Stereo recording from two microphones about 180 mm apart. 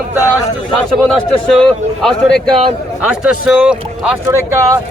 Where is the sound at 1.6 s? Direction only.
5° left (ahead or behind).